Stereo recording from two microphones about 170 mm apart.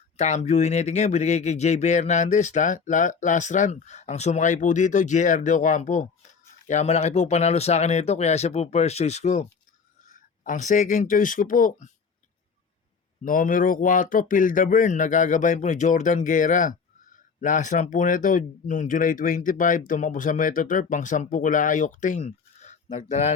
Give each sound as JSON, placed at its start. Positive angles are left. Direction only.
{"t": 0.2, "sound": "speech", "side_deg": 40}
{"t": 13.2, "sound": "speech", "side_deg": 55}